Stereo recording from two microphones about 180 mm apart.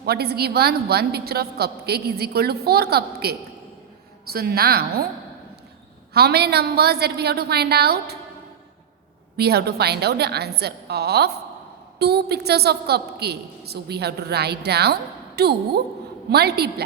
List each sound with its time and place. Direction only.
0.0 s a woman's voice: 60° right (ahead or behind)
6.1 s a woman's voice: 60° right (ahead or behind)
9.4 s a woman's voice: 60° right (ahead or behind)